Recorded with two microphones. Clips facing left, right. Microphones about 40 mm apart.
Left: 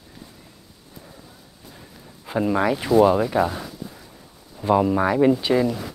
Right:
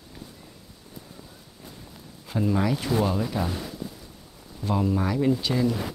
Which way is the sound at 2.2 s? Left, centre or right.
Left.